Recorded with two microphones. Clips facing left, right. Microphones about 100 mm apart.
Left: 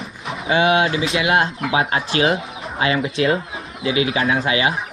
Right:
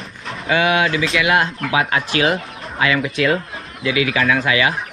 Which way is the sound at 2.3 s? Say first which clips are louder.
Even; 5° left (ahead or behind).